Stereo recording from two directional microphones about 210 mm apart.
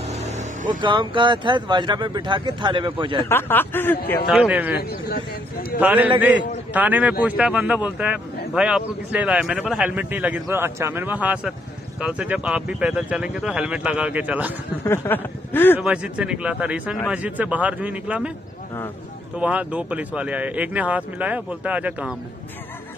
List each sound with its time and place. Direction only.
0.0 s vehicle: 35° right (ahead or behind)
0.7 s speech: 20° right (ahead or behind)
3.3 s speech: 10° left (ahead or behind)
4.3 s speech: 5° right (ahead or behind)
4.7 s speech: 50° left (ahead or behind)
5.8 s speech: 10° right (ahead or behind)
14.9 s speech: 10° left (ahead or behind)
15.8 s speech: 5° right (ahead or behind)
19.3 s speech: 5° right (ahead or behind)